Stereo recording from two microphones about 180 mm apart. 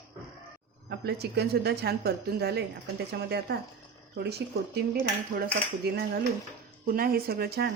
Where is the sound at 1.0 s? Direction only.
65° right (ahead or behind).